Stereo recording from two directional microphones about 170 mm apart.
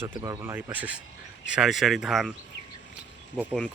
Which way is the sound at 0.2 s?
15° right (ahead or behind).